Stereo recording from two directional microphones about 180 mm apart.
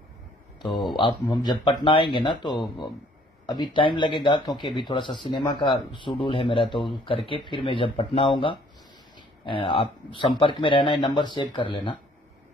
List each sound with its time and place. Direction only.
0.6 s speech: 25° left (ahead or behind)